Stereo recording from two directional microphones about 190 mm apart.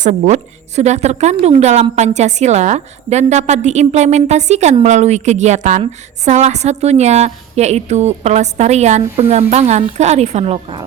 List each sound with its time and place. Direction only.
0.0 s a woman's voice: 40° right (ahead or behind)